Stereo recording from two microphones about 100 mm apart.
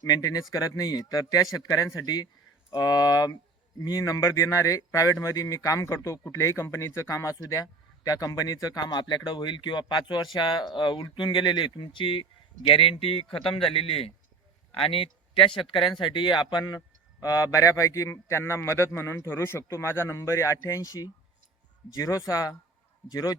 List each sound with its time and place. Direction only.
0.0 s speech: 40° left (ahead or behind)